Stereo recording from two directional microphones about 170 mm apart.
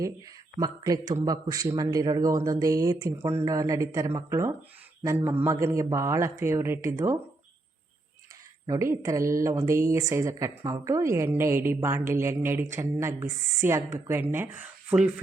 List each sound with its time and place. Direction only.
0.6 s a man's voice: 20° right (ahead or behind)
8.6 s a woman's voice: 15° right (ahead or behind)